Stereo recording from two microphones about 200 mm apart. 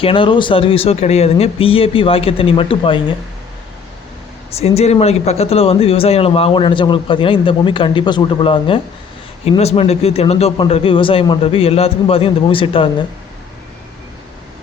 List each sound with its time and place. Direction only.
0.0 s speech: 25° left (ahead or behind)
4.5 s speech: 30° left (ahead or behind)